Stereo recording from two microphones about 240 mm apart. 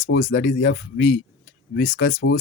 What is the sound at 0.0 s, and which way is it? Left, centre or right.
Speech, left.